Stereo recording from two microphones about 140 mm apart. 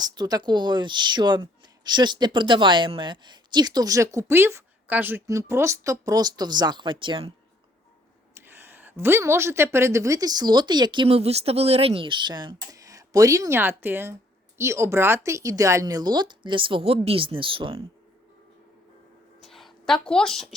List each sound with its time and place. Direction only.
0.0 s speech: 30° right (ahead or behind)
8.4 s a woman's voice: 15° right (ahead or behind); by 17.8 s 40° right (ahead or behind)
19.4 s a sound: centre (ahead or behind)